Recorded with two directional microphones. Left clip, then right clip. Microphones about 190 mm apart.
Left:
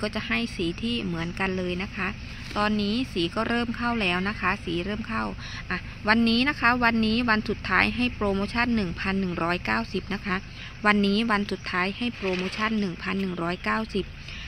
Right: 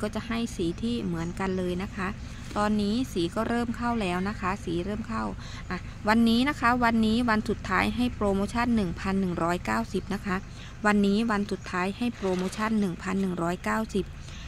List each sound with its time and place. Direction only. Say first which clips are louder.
0.0 s a woman's voice: left 4 dB; 5° right (ahead or behind)